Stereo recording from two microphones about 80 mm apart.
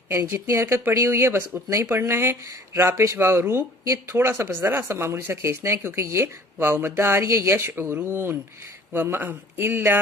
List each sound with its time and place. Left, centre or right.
0.1 s speech: right